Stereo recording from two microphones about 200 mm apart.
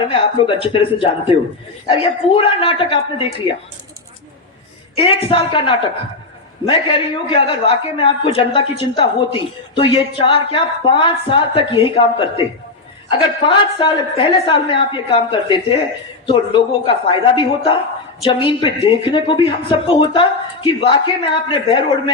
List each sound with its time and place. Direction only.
0.0 s a woman's voice: 25° left (ahead or behind)
4.9 s a woman's voice: 25° left (ahead or behind)